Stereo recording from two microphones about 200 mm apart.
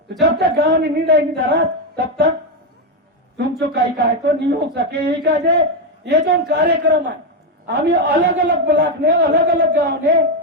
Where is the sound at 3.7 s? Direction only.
55° right (ahead or behind).